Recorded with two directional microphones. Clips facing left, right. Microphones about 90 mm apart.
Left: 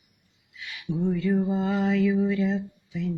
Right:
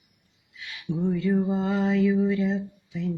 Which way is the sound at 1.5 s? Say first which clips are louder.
Even; 25° right (ahead or behind).